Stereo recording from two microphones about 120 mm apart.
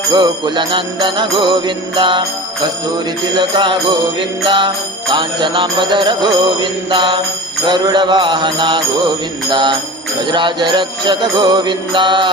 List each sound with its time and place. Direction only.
0.1 s music: 40° right (ahead or behind)
3.3 s music: 40° right (ahead or behind)